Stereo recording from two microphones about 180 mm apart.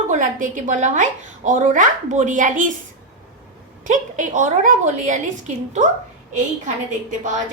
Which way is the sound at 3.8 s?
45° right (ahead or behind).